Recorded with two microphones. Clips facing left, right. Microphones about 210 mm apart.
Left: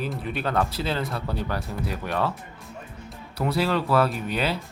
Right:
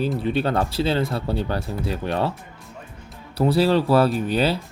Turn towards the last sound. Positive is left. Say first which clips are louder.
# right 6 dB
turn(degrees=-35)  # may be behind; listen again after turning